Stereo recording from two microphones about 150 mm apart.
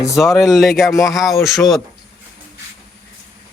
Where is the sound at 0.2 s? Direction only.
Centre (ahead or behind).